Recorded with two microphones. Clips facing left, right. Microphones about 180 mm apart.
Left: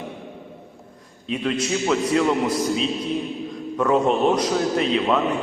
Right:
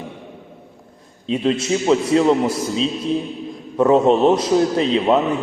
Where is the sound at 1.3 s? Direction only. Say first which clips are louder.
Right 5 dB; 30° right (ahead or behind).